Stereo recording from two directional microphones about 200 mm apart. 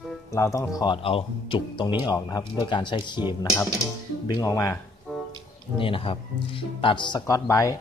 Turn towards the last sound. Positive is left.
turn(degrees=15)  # may be behind; listen again after turning